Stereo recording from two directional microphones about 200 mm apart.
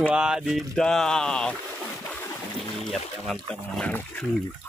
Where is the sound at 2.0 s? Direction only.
10° left (ahead or behind).